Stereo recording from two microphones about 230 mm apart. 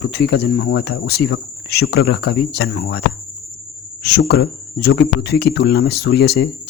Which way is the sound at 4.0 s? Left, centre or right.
Left.